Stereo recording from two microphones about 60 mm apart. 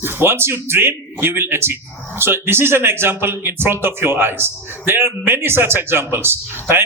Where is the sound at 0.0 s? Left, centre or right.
Right.